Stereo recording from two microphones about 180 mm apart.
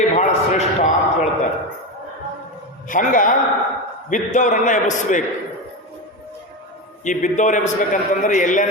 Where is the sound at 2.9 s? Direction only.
45° left (ahead or behind).